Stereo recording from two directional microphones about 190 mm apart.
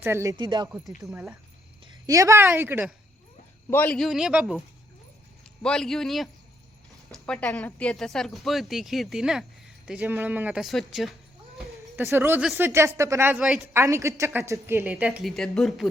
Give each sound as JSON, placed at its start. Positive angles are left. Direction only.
{"t": 0.0, "sound": "speech", "side_deg": -15}
{"t": 1.1, "sound": "a woman's voice", "side_deg": -10}
{"t": 3.7, "sound": "a man's voice", "side_deg": 10}
{"t": 11.5, "sound": "a sound", "side_deg": -10}
{"t": 12.5, "sound": "a woman's voice", "side_deg": -15}